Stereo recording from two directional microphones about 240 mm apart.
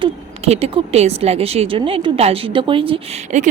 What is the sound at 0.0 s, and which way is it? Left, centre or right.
Speech, right.